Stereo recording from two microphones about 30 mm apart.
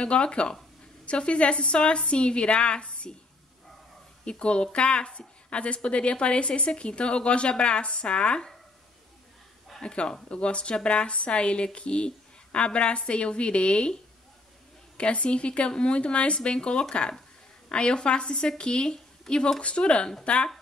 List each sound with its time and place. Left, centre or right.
0.0 s a woman's voice: left
4.2 s a woman's voice: left
9.9 s a woman's voice: left
15.0 s a woman's voice: left
19.6 s a woman's voice: left
20.3 s speech: left